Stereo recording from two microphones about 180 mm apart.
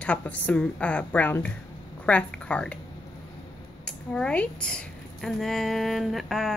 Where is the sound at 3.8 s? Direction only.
5° left (ahead or behind).